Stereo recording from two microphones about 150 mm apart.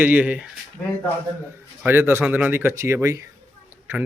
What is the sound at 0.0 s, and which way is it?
Speech, 10° right (ahead or behind).